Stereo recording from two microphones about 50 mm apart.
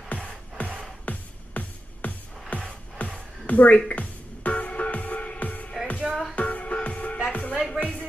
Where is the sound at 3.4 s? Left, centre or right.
Left.